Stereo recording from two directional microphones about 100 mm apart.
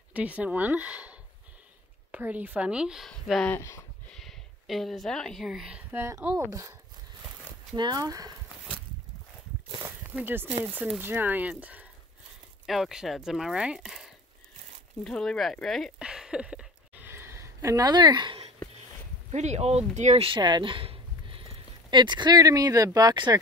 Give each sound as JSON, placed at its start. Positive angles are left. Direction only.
{"t": 0.1, "sound": "speech", "side_deg": -15}
{"t": 2.1, "sound": "speech", "side_deg": -15}
{"t": 3.4, "sound": "speech", "side_deg": 25}
{"t": 4.1, "sound": "speech", "side_deg": 0}
{"t": 6.3, "sound": "speech", "side_deg": -30}
{"t": 7.7, "sound": "speech", "side_deg": -45}
{"t": 9.8, "sound": "a sound", "side_deg": -20}
{"t": 10.6, "sound": "speech", "side_deg": -15}
{"t": 12.6, "sound": "speech", "side_deg": -5}
{"t": 16.0, "sound": "a sound", "side_deg": -10}
{"t": 19.5, "sound": "speech", "side_deg": -90}
{"t": 20.2, "sound": "a sound", "side_deg": -60}
{"t": 21.9, "sound": "speech", "side_deg": -50}